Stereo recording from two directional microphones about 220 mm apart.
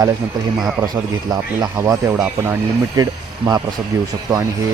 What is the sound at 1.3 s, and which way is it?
Speech, 15° right (ahead or behind).